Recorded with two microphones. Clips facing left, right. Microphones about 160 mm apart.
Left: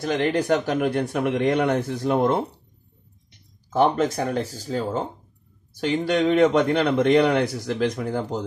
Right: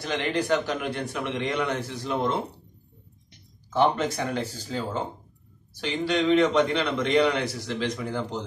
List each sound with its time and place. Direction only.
0.0 s a man's voice: 45° left (ahead or behind)
3.7 s a man's voice: 40° left (ahead or behind)